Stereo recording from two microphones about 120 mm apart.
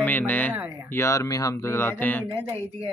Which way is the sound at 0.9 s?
25° left (ahead or behind).